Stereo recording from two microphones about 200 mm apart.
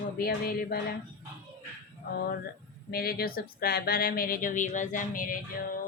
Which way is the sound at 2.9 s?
50° left (ahead or behind).